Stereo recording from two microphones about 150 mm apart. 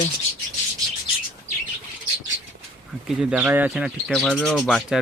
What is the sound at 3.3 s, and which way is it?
Speech, 10° right (ahead or behind).